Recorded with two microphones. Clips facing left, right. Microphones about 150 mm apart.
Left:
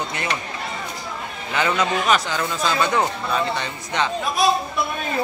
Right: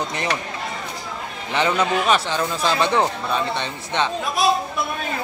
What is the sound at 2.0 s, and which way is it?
Speech, 30° right (ahead or behind).